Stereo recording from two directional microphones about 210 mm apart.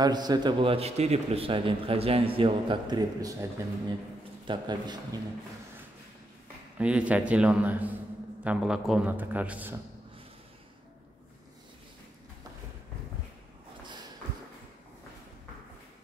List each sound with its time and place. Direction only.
0.0 s a man's voice: 20° right (ahead or behind)
4.5 s a man's voice: 20° right (ahead or behind)
6.8 s a man's voice: 5° right (ahead or behind)